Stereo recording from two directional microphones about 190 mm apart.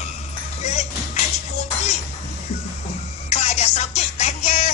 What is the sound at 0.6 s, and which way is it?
Music, 35° left (ahead or behind).